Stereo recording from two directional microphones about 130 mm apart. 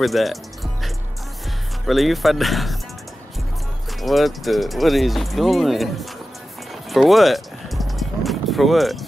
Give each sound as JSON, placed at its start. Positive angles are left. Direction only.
{"t": 0.0, "sound": "music", "side_deg": 0}
{"t": 1.9, "sound": "speech", "side_deg": 0}
{"t": 4.0, "sound": "speech", "side_deg": 0}
{"t": 6.7, "sound": "music", "side_deg": 0}